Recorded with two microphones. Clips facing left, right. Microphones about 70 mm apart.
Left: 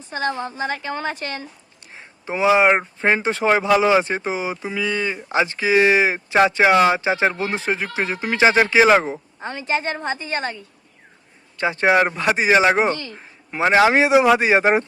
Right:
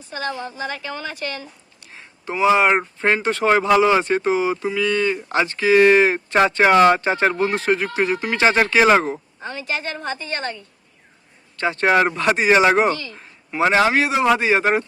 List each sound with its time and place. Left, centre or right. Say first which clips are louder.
0.1 s a woman's voice: left 3 dB; left; by 9.2 s centre
9.4 s a woman's voice: left 5 dB; left; by 12.5 s centre
12.9 s a sound: even; left
13.6 s a woman's voice: left 2 dB; centre